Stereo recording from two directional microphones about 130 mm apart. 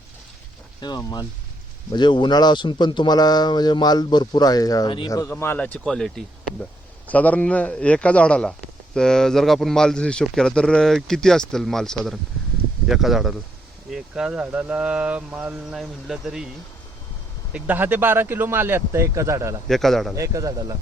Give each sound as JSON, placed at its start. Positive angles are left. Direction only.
{"t": 0.8, "sound": "a man's voice", "side_deg": 35}
{"t": 17.5, "sound": "speech", "side_deg": -15}
{"t": 19.6, "sound": "speech", "side_deg": 0}
{"t": 20.1, "sound": "a man's voice", "side_deg": -25}